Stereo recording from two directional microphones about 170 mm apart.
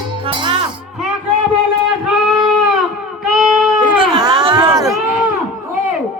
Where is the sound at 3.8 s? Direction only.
25° right (ahead or behind).